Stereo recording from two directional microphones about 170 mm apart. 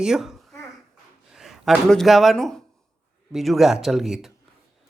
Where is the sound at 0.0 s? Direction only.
Centre (ahead or behind).